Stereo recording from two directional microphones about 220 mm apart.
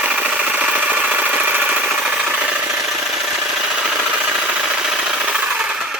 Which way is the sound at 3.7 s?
Centre (ahead or behind).